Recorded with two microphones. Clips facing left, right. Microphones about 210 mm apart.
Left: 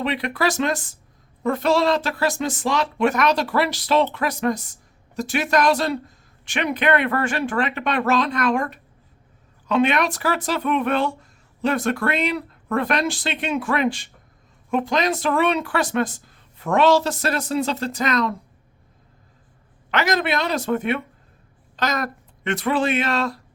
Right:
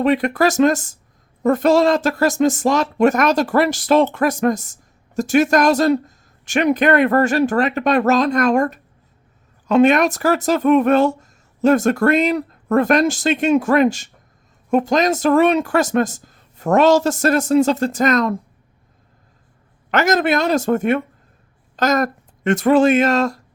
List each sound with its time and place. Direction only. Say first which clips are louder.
0.0 s speech: right 7 dB; 45° right (ahead or behind)
19.9 s speech: right 5 dB; 45° right (ahead or behind)